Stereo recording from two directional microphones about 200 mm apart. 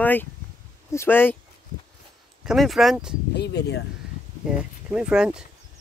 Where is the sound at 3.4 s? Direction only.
55° left (ahead or behind).